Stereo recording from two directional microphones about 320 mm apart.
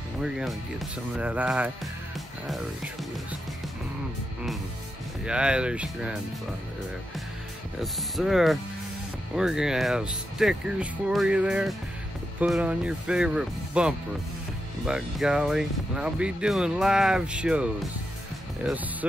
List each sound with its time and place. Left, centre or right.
0.2 s speech: centre
5.2 s speech: centre
7.8 s speech: centre